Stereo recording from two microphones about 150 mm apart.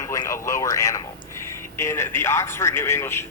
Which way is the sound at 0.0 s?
20° left (ahead or behind).